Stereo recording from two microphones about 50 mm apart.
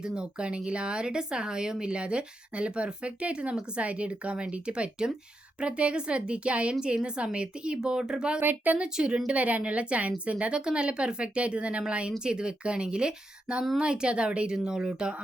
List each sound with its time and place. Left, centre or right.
0.0 s speech: centre
8.4 s a woman's voice: right
8.8 s speech: centre